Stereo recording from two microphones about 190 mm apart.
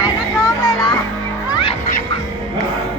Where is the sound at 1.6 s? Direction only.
25° left (ahead or behind).